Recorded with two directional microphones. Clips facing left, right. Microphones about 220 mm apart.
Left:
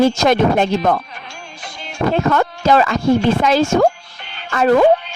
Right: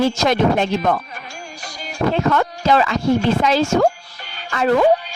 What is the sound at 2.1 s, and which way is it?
Speech, 45° left (ahead or behind).